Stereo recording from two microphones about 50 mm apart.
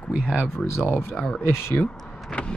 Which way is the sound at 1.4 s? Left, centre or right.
Left.